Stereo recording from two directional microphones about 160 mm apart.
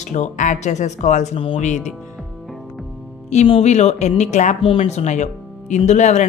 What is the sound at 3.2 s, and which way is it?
Speech, 40° left (ahead or behind).